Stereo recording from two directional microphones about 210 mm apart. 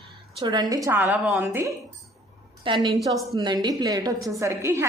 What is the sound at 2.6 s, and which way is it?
A woman's voice, 20° right (ahead or behind).